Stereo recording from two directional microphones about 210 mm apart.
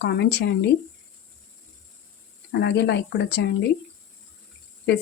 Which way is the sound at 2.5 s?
55° left (ahead or behind).